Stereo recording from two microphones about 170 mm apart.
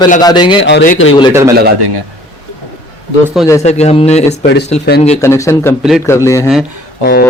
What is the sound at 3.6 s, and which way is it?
Speech, 40° left (ahead or behind).